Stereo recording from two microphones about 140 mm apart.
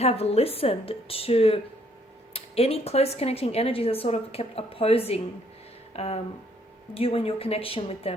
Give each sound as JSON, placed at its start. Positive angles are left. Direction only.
{"t": 0.0, "sound": "speech", "side_deg": 45}